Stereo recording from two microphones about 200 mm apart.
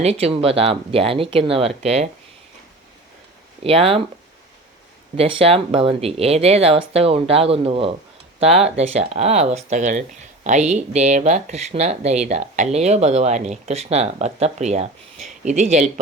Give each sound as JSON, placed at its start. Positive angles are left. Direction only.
{"t": 0.0, "sound": "speech", "side_deg": -30}
{"t": 3.6, "sound": "speech", "side_deg": -30}
{"t": 5.1, "sound": "speech", "side_deg": -30}